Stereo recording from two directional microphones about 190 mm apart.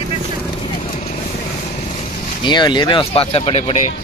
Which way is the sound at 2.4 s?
25° left (ahead or behind).